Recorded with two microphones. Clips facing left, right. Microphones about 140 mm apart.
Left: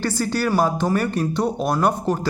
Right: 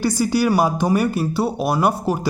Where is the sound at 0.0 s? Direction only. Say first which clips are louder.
Right 4 dB; 10° right (ahead or behind).